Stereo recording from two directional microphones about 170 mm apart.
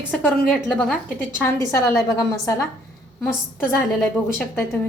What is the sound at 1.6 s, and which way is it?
A woman's voice, 15° left (ahead or behind).